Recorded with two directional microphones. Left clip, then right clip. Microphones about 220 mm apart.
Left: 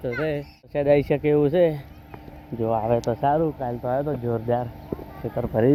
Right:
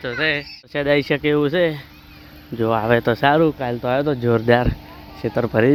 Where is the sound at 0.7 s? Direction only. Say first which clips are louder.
Right 1 dB; 10° right (ahead or behind).